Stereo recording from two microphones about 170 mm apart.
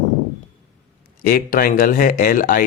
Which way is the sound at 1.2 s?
60° left (ahead or behind).